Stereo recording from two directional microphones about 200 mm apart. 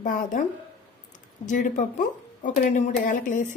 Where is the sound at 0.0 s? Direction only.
40° left (ahead or behind).